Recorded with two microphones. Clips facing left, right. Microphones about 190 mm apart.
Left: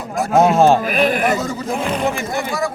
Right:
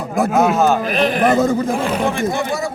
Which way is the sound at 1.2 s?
55° right (ahead or behind).